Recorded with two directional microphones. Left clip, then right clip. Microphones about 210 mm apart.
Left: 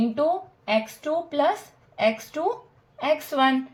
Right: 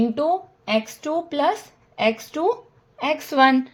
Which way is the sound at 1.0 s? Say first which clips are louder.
Right 2 dB; 50° right (ahead or behind).